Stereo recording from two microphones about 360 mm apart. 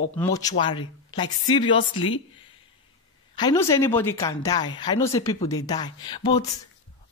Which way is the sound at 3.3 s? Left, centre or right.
Centre.